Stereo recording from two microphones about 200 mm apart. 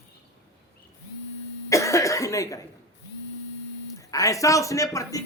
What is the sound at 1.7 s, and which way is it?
Cough, 15° left (ahead or behind).